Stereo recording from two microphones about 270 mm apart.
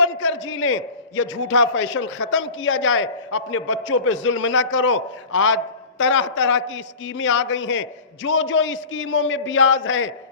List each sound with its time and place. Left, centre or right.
0.0 s a man's voice: left